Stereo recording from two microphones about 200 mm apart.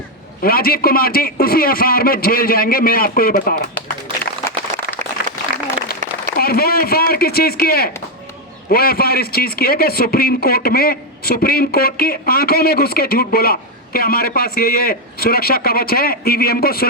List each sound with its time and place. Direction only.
0.4 s a man's voice: 50° left (ahead or behind)
6.2 s a man's voice: 50° left (ahead or behind)